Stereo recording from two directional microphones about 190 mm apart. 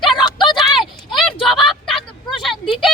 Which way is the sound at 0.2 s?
25° left (ahead or behind).